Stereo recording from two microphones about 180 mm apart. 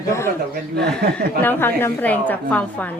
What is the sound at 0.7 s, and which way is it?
Speech, 65° right (ahead or behind).